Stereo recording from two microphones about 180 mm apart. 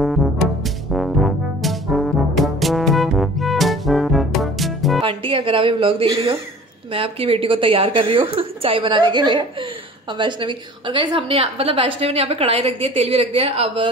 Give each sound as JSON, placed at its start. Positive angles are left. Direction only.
{"t": 0.0, "sound": "music", "side_deg": 0}
{"t": 0.9, "sound": "brass instrument", "side_deg": 0}
{"t": 5.0, "sound": "a sound", "side_deg": -30}
{"t": 6.9, "sound": "a woman's voice", "side_deg": -30}